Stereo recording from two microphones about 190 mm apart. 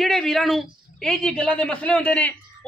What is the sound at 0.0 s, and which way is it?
A man's voice, centre (ahead or behind).